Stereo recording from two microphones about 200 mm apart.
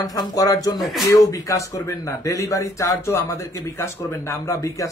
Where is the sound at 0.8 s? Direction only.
Centre (ahead or behind).